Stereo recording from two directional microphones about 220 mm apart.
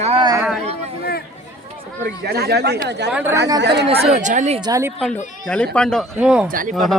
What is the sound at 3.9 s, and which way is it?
Speech, 30° right (ahead or behind).